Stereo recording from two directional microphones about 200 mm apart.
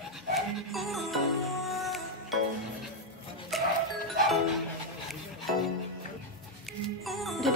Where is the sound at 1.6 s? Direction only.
Centre (ahead or behind).